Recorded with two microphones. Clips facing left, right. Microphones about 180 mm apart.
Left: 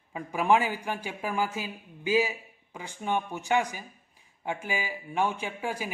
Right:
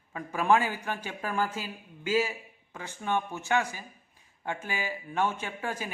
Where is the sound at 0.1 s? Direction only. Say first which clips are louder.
Left 1 dB; 15° left (ahead or behind).